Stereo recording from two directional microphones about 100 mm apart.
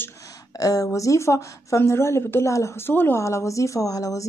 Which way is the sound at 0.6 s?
35° left (ahead or behind).